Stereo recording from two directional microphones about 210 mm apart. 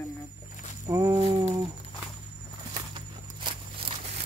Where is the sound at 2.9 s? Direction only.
25° right (ahead or behind).